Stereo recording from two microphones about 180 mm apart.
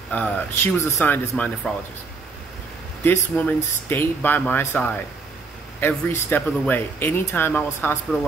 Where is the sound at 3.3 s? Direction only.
10° left (ahead or behind).